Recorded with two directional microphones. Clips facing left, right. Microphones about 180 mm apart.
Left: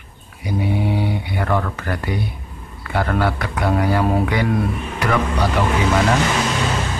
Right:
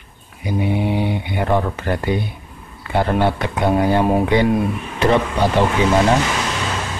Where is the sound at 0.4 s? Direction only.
20° right (ahead or behind).